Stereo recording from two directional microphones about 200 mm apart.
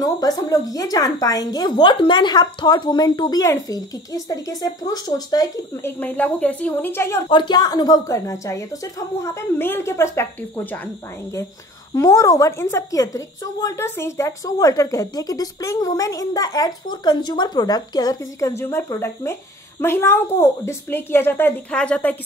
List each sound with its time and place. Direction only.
0.0 s a woman's voice: 20° left (ahead or behind)
7.2 s a woman's voice: 20° left (ahead or behind)
11.9 s a woman's voice: 15° left (ahead or behind)